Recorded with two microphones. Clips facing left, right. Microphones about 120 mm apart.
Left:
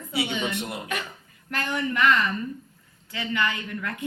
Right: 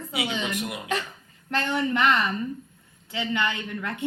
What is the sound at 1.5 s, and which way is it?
A woman's voice, 25° right (ahead or behind).